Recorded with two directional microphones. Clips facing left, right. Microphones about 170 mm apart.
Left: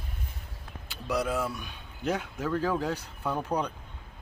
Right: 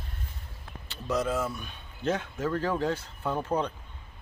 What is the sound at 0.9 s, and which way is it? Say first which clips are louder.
Speech: right 1 dB; 10° left (ahead or behind).